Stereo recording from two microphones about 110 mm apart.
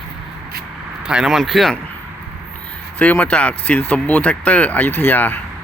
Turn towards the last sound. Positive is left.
turn(degrees=15)  # may be behind; listen again after turning